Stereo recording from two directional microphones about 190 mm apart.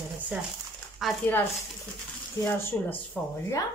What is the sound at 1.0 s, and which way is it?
Speech, centre (ahead or behind).